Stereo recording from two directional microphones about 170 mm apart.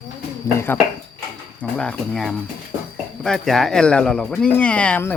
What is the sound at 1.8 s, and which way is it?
Speech, 5° left (ahead or behind).